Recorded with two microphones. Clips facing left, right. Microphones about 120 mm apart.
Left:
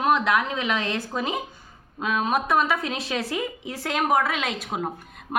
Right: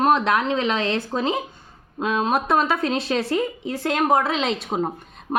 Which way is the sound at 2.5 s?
Centre (ahead or behind).